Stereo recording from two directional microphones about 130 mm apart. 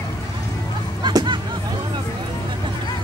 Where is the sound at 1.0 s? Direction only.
35° right (ahead or behind).